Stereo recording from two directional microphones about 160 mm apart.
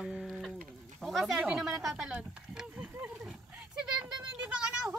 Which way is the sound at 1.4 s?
Centre (ahead or behind).